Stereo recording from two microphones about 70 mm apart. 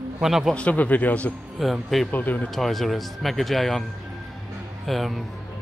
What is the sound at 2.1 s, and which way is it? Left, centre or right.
Speech, left.